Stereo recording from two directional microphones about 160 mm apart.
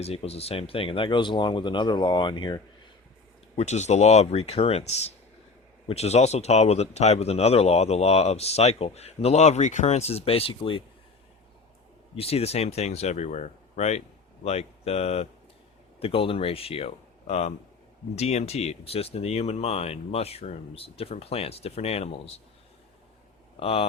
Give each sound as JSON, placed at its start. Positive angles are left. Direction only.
{"t": 0.0, "sound": "speech", "side_deg": 40}
{"t": 3.5, "sound": "speech", "side_deg": 40}
{"t": 12.1, "sound": "speech", "side_deg": 40}
{"t": 23.6, "sound": "speech", "side_deg": 35}